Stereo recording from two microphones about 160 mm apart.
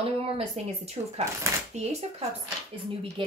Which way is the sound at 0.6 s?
40° right (ahead or behind).